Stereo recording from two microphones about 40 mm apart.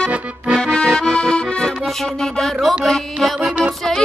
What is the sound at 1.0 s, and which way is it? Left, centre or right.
Accordion, centre.